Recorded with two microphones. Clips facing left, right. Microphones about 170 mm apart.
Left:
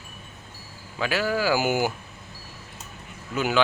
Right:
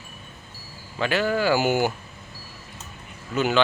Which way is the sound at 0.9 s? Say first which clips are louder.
Right 2 dB; 5° left (ahead or behind).